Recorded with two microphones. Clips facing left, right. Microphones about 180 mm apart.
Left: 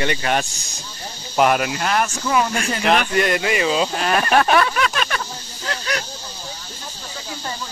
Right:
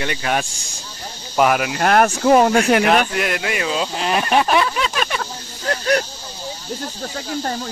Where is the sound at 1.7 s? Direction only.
55° right (ahead or behind).